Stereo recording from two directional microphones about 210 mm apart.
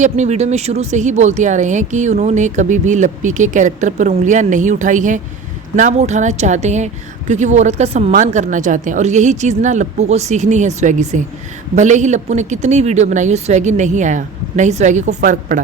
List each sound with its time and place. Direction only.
0.0 s speech: 35° right (ahead or behind)